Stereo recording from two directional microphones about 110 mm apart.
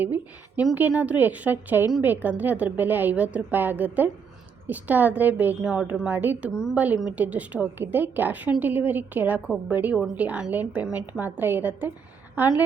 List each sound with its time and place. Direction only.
0.0 s a woman's voice: 15° right (ahead or behind)